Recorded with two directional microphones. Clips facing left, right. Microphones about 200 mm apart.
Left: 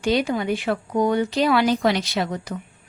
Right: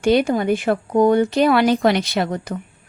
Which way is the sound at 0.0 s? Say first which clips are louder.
Right 5 dB; 55° right (ahead or behind).